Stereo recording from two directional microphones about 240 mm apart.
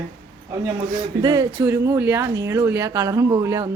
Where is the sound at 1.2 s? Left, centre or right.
Centre.